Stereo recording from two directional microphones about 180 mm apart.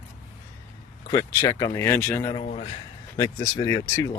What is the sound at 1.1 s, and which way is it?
Speech, 20° left (ahead or behind).